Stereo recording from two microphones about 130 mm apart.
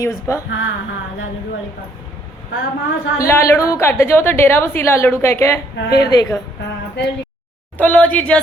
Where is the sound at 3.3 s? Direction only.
20° left (ahead or behind).